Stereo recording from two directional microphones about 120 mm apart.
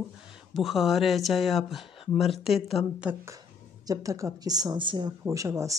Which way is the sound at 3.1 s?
10° right (ahead or behind).